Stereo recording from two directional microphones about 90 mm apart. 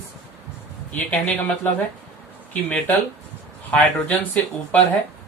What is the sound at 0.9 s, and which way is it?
Speech, 15° left (ahead or behind).